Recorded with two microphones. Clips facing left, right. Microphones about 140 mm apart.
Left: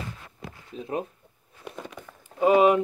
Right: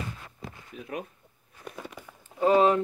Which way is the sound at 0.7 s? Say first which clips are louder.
Left 6 dB; 30° left (ahead or behind).